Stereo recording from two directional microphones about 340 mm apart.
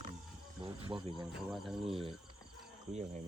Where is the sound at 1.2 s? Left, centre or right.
Centre.